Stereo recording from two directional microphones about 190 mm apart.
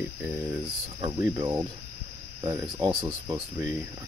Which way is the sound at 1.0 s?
20° right (ahead or behind).